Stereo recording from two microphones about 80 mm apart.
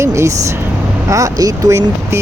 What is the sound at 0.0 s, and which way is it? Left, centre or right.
Vehicle, right.